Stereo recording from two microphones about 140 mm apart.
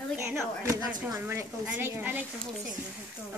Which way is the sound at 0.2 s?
20° right (ahead or behind).